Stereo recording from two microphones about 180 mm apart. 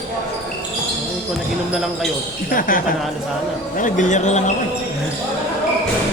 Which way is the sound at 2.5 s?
50° left (ahead or behind).